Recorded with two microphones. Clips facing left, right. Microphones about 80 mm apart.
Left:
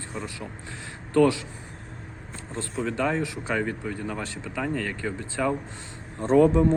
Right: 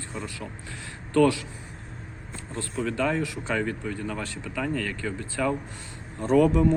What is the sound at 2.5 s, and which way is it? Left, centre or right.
Speech, left.